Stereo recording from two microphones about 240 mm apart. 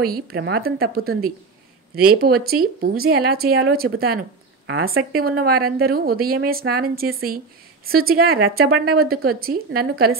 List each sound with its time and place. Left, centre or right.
0.0 s speech: right